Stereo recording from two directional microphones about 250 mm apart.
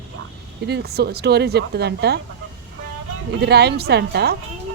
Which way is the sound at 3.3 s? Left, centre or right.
Right.